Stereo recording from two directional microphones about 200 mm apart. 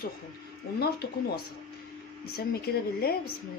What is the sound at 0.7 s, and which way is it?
A woman's voice, 50° left (ahead or behind).